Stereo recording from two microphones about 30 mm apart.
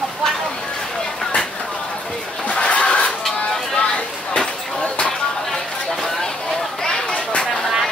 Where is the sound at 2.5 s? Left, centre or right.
Left.